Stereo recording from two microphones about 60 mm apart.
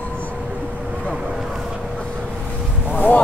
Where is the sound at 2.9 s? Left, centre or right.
Left.